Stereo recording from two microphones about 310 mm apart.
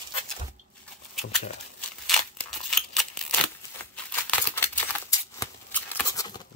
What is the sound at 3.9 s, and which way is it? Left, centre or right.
Scissors, centre.